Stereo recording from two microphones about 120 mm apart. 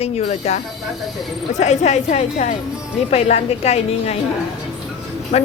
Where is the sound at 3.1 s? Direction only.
60° left (ahead or behind).